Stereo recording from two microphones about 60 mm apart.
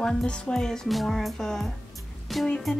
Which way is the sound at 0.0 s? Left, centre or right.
Centre.